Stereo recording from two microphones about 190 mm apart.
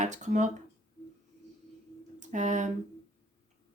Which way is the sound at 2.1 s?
40° right (ahead or behind).